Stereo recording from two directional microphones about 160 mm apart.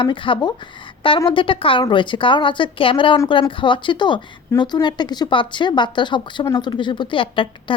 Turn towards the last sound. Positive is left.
turn(degrees=30)  # may be behind; listen again after turning